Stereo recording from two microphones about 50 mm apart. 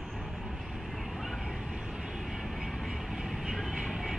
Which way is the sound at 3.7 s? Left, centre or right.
Centre.